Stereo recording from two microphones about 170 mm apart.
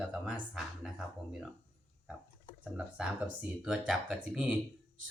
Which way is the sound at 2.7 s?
5° right (ahead or behind).